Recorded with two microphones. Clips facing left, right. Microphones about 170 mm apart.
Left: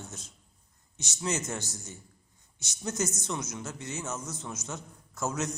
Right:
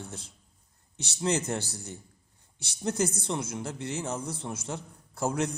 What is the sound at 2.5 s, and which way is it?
A man's voice, 30° right (ahead or behind).